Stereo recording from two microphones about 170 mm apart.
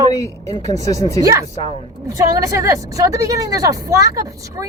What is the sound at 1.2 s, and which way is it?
A woman's voice, 20° right (ahead or behind).